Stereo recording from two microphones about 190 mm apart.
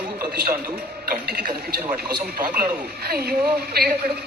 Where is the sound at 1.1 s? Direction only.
50° right (ahead or behind).